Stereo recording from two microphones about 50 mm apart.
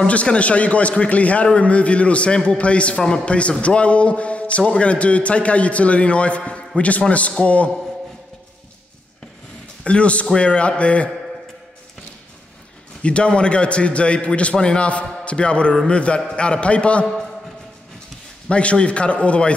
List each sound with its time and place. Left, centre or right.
0.0 s a man's voice: left
9.8 s a man's voice: left
13.0 s a man's voice: left
18.5 s a man's voice: left